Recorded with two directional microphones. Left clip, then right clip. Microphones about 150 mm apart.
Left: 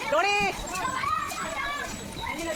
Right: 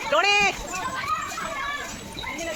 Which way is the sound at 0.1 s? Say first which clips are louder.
Right 4 dB; 55° right (ahead or behind).